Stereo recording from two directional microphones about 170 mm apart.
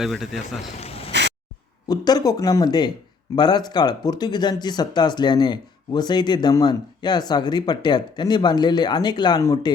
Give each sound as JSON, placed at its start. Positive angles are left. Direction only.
{"t": 0.0, "sound": "a man's voice", "side_deg": 0}
{"t": 0.8, "sound": "a sound", "side_deg": 35}
{"t": 1.9, "sound": "speech", "side_deg": 20}